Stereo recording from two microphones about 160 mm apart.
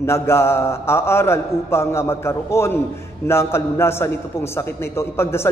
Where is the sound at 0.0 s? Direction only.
15° left (ahead or behind).